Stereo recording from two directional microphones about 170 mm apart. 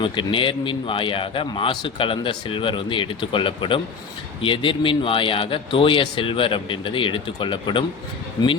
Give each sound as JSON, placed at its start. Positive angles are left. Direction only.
{"t": 0.0, "sound": "a man's voice", "side_deg": 30}